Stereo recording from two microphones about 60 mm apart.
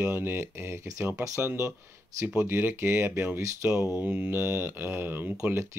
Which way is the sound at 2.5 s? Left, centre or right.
Right.